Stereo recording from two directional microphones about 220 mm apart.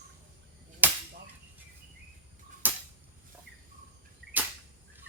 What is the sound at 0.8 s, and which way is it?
Cap gun, 10° right (ahead or behind).